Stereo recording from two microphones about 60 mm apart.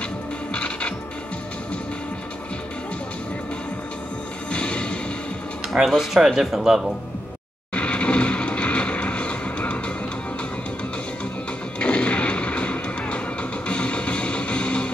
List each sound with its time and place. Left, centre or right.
0.5 s music: centre
4.5 s music: centre
5.7 s speech: centre
7.7 s music: centre
11.8 s music: centre